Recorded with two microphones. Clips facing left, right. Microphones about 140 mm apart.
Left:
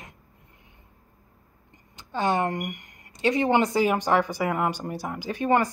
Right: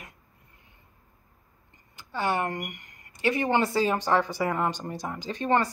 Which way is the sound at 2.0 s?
20° left (ahead or behind).